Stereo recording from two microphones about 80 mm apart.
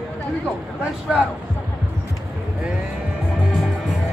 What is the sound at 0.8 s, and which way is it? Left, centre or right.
Speech, centre.